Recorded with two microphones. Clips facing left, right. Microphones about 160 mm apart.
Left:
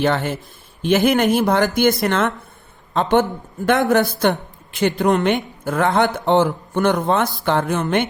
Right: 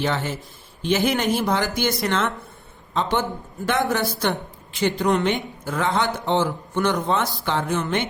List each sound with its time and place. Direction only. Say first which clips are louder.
0.0 s a woman's voice: left 5 dB; 55° left (ahead or behind)